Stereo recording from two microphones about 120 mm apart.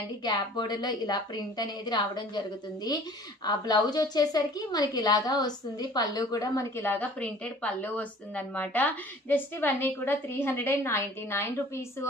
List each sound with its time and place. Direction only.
0.2 s a woman's voice: 35° left (ahead or behind)